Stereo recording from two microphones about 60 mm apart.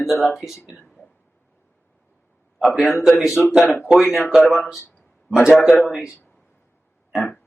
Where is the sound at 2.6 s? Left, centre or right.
Centre.